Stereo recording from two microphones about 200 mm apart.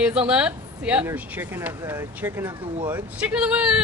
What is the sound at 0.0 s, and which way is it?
A woman's voice, 5° right (ahead or behind).